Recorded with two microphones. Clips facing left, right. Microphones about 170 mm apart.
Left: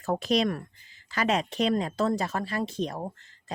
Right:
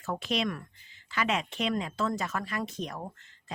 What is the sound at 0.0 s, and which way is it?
Speech, 40° left (ahead or behind).